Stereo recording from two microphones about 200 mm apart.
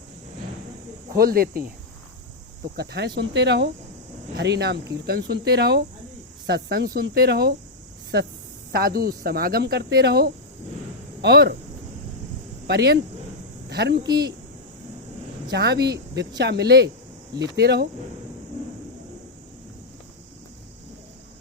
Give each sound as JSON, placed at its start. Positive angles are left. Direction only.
{"t": 1.1, "sound": "speech", "side_deg": -50}
{"t": 2.7, "sound": "speech", "side_deg": -55}
{"t": 8.7, "sound": "speech", "side_deg": -50}
{"t": 12.6, "sound": "speech", "side_deg": -55}
{"t": 15.5, "sound": "speech", "side_deg": -55}